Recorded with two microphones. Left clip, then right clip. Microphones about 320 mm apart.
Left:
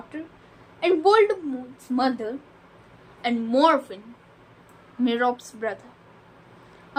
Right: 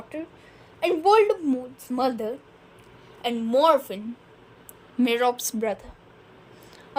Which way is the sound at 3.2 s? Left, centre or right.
Right.